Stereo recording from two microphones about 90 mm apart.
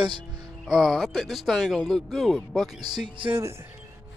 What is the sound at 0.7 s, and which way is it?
Speech, centre (ahead or behind).